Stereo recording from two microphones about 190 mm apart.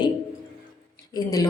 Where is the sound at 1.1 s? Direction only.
20° left (ahead or behind).